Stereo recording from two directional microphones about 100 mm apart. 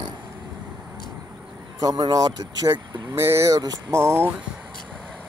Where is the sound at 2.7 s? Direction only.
25° right (ahead or behind).